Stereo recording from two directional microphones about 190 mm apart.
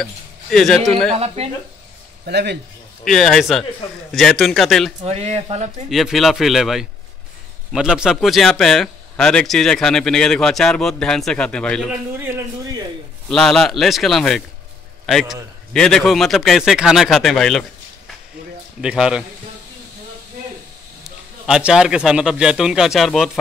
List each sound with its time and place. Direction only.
0.0 s speech: centre (ahead or behind)
1.1 s speech: 35° right (ahead or behind)
2.2 s speech: 60° right (ahead or behind)
3.1 s speech: centre (ahead or behind)
5.0 s speech: 35° right (ahead or behind)
5.9 s speech: centre (ahead or behind)
13.3 s a man's voice: 5° left (ahead or behind)
21.5 s speech: 5° right (ahead or behind)